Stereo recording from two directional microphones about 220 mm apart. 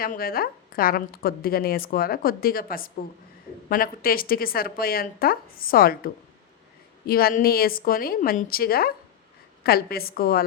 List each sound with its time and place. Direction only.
0.0 s a woman's voice: 40° left (ahead or behind)
7.1 s a woman's voice: 45° left (ahead or behind)